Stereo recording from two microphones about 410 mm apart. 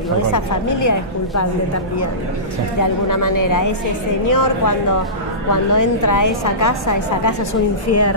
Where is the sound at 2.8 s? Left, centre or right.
Left.